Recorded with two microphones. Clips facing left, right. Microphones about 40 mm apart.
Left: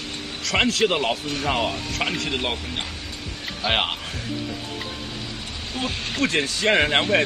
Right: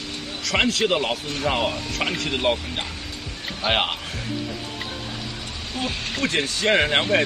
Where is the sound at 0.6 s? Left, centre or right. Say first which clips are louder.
Left 1 dB; left.